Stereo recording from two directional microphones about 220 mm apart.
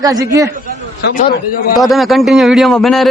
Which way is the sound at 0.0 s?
15° right (ahead or behind).